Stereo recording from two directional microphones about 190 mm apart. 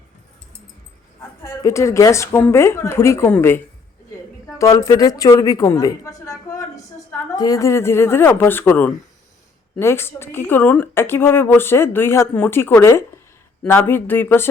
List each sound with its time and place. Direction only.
1.5 s a woman's voice: 15° left (ahead or behind)